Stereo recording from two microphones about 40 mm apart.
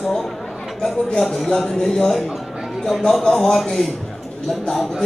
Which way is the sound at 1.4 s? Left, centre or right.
Centre.